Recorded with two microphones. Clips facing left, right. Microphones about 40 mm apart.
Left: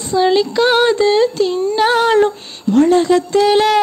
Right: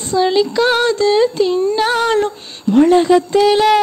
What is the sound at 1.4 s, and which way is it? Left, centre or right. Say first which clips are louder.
Speech: right 1 dB; centre.